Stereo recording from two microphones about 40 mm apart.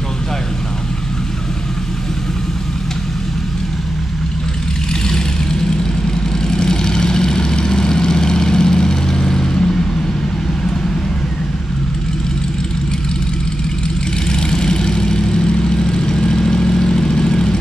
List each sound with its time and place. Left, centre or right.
6.0 s vehicle: centre
14.3 s vehicle: centre